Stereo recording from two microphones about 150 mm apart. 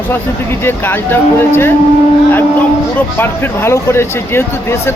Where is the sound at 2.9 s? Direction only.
15° left (ahead or behind).